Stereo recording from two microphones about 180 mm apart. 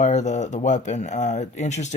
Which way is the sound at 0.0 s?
40° left (ahead or behind).